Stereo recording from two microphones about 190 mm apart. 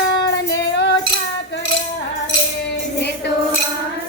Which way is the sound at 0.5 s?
70° left (ahead or behind).